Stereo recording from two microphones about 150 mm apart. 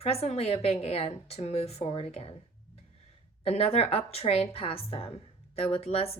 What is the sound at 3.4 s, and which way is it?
A woman's voice, 40° left (ahead or behind).